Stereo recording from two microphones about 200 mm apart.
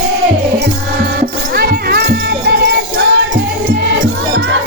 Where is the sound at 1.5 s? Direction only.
50° right (ahead or behind).